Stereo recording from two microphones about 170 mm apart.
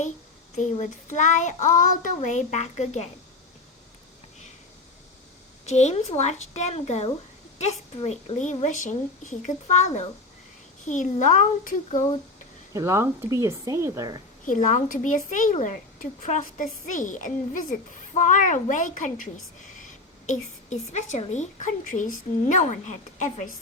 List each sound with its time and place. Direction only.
0.5 s a woman's voice: 45° left (ahead or behind)
5.6 s a woman's voice: 40° left (ahead or behind)
12.7 s a woman's voice: 15° right (ahead or behind)
14.4 s a woman's voice: 50° left (ahead or behind)